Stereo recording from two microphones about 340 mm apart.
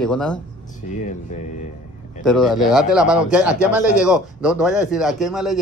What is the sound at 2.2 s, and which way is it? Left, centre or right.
A man's voice, centre.